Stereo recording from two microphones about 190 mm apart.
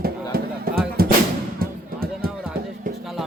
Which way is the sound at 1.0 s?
50° right (ahead or behind).